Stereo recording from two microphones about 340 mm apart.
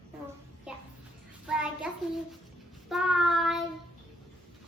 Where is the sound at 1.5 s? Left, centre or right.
Centre.